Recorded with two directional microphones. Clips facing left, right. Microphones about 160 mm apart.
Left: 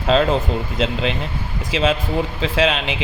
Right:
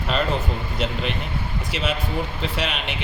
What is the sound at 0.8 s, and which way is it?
A man's voice, 90° left.